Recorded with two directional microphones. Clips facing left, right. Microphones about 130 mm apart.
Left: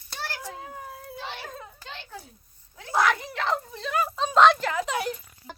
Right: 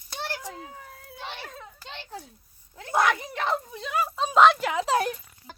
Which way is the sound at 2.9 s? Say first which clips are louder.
Even; 20° right (ahead or behind).